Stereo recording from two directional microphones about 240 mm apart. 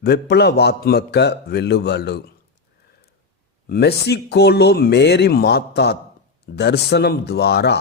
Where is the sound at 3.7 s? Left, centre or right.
Left.